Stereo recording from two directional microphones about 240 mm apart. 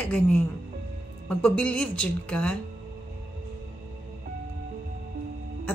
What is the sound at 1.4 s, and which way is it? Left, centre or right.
A woman's voice, centre.